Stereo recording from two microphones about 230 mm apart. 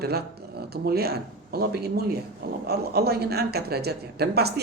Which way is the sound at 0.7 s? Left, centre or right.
Right.